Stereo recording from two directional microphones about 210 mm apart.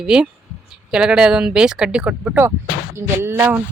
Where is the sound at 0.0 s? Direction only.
5° right (ahead or behind).